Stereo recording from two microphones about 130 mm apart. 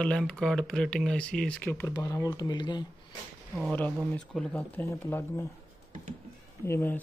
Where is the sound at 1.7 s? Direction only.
25° left (ahead or behind).